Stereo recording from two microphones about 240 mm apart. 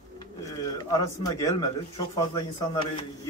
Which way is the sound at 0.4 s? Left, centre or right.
Centre.